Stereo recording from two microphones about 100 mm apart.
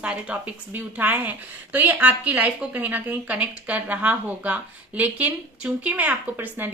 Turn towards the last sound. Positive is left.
turn(degrees=-20)  # may be behind; listen again after turning